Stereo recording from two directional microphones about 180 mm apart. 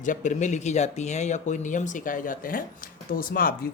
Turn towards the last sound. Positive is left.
turn(degrees=55)  # may be behind; listen again after turning